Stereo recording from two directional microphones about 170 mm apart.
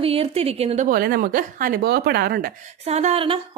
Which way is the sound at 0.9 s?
60° right (ahead or behind).